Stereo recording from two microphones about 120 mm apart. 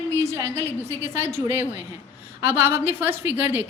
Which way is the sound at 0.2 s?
25° right (ahead or behind).